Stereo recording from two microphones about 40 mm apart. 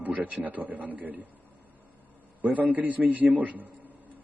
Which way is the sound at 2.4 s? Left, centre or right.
Right.